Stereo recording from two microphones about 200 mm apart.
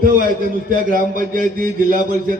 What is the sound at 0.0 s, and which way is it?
A man's voice, 45° right (ahead or behind).